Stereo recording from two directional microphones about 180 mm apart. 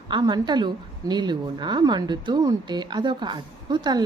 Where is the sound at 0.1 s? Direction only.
25° right (ahead or behind).